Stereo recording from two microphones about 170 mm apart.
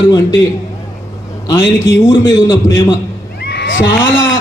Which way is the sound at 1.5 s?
15° left (ahead or behind).